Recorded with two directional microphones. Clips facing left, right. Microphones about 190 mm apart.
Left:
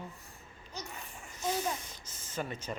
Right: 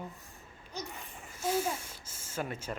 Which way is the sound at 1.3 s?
5° right (ahead or behind).